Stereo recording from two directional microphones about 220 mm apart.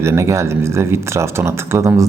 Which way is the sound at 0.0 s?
10° right (ahead or behind).